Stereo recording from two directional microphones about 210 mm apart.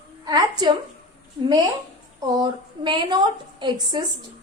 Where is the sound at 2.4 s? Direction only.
20° right (ahead or behind).